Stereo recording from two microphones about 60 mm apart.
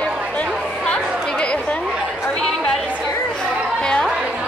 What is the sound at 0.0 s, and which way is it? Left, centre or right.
Chatter, centre.